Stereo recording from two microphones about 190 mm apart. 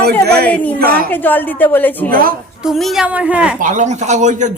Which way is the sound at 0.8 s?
50° right (ahead or behind).